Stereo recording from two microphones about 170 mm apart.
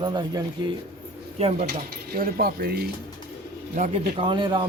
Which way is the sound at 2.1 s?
60° right (ahead or behind).